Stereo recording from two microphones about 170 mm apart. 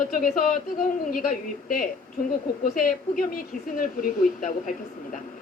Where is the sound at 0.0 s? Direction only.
55° left (ahead or behind).